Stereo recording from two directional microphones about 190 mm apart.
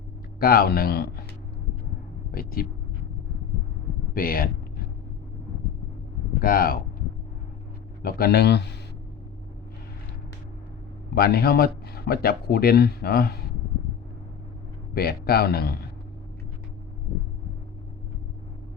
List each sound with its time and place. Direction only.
0.3 s speech: 50° left (ahead or behind)
2.3 s speech: 50° left (ahead or behind)
4.1 s speech: 50° left (ahead or behind)
6.4 s speech: 50° left (ahead or behind)
8.0 s speech: 55° left (ahead or behind)
11.1 s speech: 55° left (ahead or behind)
14.9 s speech: 55° left (ahead or behind)